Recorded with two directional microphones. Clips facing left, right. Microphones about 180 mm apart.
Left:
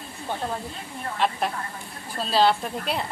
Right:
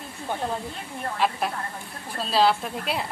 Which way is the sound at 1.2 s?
5° right (ahead or behind).